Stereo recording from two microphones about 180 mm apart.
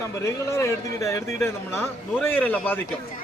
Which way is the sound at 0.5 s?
15° left (ahead or behind).